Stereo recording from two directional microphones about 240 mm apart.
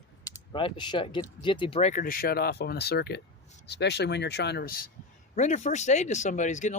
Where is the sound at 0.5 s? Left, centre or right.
Centre.